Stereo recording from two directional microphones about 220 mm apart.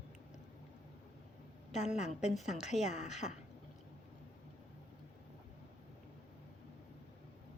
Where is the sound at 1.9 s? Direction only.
30° left (ahead or behind).